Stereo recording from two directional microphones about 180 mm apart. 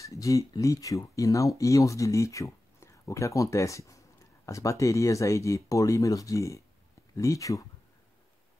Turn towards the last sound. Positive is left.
turn(degrees=15)  # may be behind; listen again after turning